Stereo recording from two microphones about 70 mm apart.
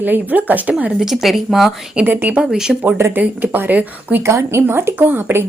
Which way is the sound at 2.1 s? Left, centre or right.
Right.